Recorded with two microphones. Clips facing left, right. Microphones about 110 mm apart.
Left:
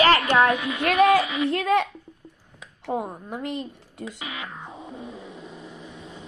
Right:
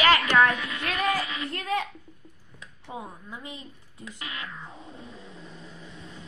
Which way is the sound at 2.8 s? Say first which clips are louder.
Left 10 dB; 65° left (ahead or behind).